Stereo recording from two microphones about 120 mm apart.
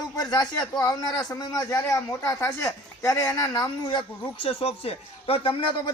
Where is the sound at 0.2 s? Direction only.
35° left (ahead or behind).